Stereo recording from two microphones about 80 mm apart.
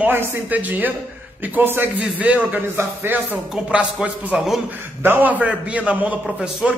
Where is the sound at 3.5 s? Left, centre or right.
Centre.